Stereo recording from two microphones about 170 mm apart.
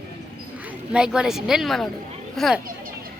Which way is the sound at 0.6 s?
5° right (ahead or behind).